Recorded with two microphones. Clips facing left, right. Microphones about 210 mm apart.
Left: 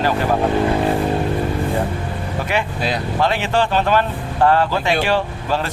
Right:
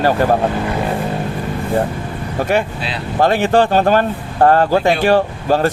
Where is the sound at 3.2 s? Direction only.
45° right (ahead or behind).